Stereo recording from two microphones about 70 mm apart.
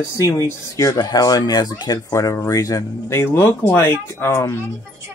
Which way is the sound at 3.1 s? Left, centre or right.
Left.